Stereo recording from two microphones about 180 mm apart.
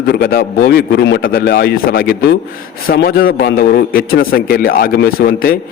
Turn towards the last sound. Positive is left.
turn(degrees=55)  # may be behind; listen again after turning